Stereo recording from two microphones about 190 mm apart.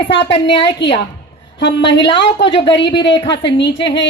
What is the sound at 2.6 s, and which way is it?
Speech, 65° left (ahead or behind).